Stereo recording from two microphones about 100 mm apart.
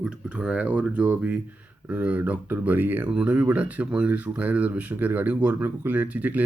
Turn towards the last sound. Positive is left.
turn(degrees=-15)  # may be behind; listen again after turning